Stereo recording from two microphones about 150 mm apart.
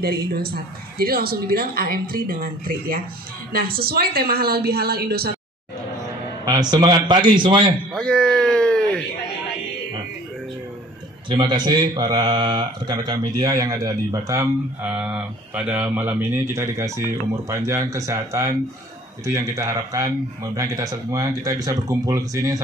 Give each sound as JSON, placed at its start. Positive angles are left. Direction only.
{"t": 0.3, "sound": "a woman's voice", "side_deg": -90}
{"t": 3.5, "sound": "a woman's voice", "side_deg": -85}
{"t": 6.4, "sound": "speech", "side_deg": -25}
{"t": 7.9, "sound": "a sound", "side_deg": 5}
{"t": 11.2, "sound": "speech", "side_deg": -30}